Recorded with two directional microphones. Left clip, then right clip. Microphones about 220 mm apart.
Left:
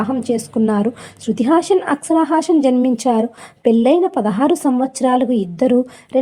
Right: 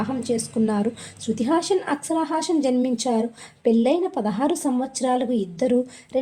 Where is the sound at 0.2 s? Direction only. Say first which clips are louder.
Left 5 dB; 20° left (ahead or behind).